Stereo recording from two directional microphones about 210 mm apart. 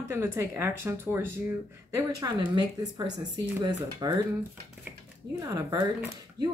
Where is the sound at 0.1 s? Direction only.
10° right (ahead or behind).